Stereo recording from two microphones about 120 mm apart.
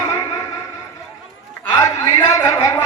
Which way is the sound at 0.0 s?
30° left (ahead or behind).